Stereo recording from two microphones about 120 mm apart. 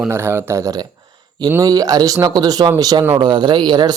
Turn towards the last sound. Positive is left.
turn(degrees=-40)  # may be behind; listen again after turning